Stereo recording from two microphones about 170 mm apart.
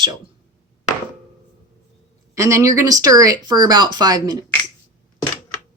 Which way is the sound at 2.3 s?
20° right (ahead or behind).